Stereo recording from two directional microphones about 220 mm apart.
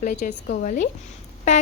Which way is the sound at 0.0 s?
35° left (ahead or behind).